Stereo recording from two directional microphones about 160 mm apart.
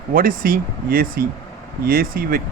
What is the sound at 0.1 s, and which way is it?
Speech, 60° right (ahead or behind).